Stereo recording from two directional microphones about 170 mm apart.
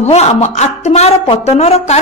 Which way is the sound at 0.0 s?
40° left (ahead or behind).